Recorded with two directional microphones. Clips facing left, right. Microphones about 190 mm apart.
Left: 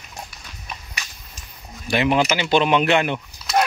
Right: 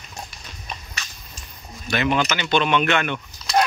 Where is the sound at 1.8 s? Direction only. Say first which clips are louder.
Left 3 dB; 25° left (ahead or behind).